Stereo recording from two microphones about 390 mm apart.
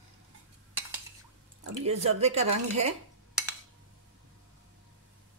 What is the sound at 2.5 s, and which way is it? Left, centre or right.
Speech, right.